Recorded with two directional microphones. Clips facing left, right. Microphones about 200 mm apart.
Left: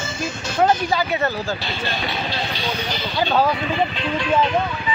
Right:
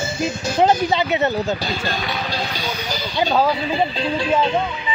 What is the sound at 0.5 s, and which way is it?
Speech, 20° right (ahead or behind).